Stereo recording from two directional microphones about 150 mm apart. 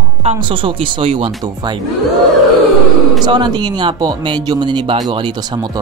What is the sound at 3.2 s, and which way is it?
Speech, 30° right (ahead or behind).